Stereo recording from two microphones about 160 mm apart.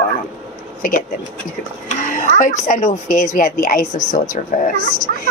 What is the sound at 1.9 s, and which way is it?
A woman's voice, 50° left (ahead or behind).